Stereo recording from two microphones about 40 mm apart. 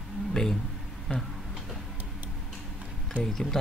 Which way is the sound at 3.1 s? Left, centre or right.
Right.